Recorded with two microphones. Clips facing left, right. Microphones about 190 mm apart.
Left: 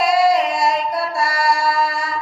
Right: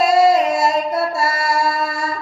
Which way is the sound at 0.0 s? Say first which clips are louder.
Right 2 dB; 25° right (ahead or behind).